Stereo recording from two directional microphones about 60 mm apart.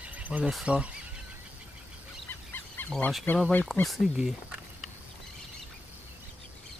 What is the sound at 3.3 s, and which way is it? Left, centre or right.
Speech, left.